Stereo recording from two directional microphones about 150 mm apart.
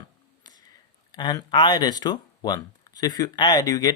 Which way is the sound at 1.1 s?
30° left (ahead or behind).